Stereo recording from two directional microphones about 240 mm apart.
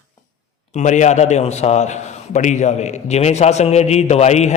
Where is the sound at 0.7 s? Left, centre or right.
Left.